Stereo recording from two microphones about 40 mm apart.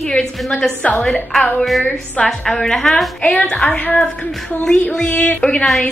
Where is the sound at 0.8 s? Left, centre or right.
Left.